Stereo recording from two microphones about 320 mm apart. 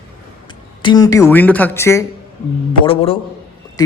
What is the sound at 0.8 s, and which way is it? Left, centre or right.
A man's voice, centre.